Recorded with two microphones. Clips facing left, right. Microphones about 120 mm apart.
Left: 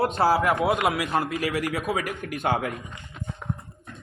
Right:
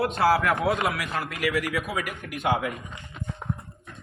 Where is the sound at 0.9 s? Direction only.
25° left (ahead or behind).